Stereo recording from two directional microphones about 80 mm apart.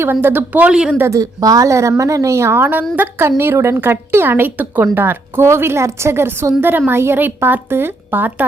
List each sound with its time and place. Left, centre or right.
0.0 s a woman's voice: right
0.7 s speech: centre
0.9 s a woman's voice: right
1.2 s a woman's voice: right